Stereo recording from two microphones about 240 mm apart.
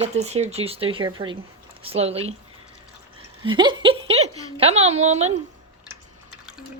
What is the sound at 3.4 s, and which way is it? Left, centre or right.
A woman's voice, centre.